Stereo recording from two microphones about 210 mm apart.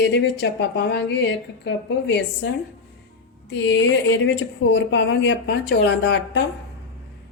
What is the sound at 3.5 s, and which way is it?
A woman's voice, 60° left (ahead or behind).